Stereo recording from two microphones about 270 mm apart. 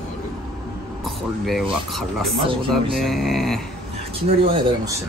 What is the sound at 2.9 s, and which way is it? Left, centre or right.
Speech, centre.